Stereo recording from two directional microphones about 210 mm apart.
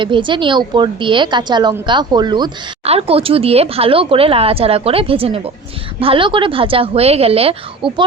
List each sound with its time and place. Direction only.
0.0 s a woman's voice: 25° right (ahead or behind)